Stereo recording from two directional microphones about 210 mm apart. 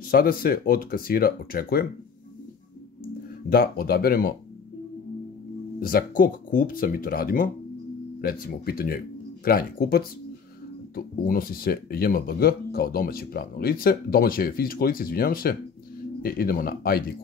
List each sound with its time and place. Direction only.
0.1 s speech: 45° left (ahead or behind)
3.4 s speech: 45° left (ahead or behind)
5.8 s speech: 45° left (ahead or behind)